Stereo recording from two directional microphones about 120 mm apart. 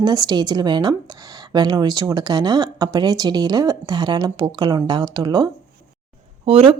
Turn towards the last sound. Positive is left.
turn(degrees=-55)  # may be behind; listen again after turning